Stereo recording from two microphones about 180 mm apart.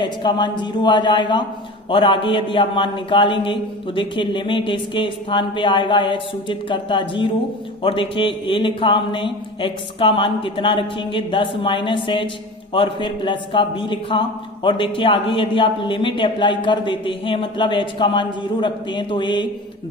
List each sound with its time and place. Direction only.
0.0 s a man's voice: 25° left (ahead or behind)